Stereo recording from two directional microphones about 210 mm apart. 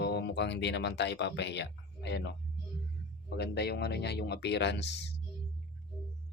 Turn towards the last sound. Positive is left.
turn(degrees=55)  # may be behind; listen again after turning